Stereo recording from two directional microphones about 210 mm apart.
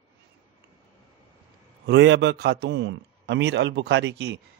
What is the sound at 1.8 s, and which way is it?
Speech, 55° right (ahead or behind).